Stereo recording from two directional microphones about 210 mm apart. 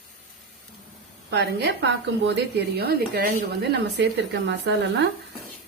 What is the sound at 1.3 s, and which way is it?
A woman's voice, 50° right (ahead or behind).